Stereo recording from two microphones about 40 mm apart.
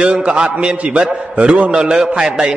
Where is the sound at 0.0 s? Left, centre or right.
Right.